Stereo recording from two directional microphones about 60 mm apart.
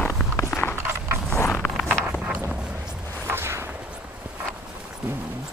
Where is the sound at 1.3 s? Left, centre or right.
Left.